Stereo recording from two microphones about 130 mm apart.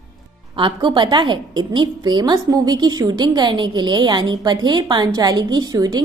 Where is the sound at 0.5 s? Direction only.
40° right (ahead or behind).